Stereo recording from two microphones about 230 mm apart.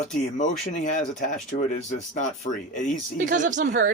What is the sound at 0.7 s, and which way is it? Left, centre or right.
Speech, left.